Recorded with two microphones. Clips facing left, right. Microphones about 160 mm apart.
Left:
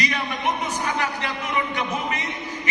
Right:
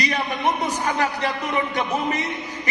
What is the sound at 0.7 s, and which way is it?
Speech, 40° right (ahead or behind).